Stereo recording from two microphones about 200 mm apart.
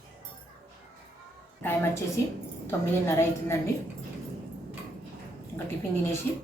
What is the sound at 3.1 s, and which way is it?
Speech, 15° left (ahead or behind).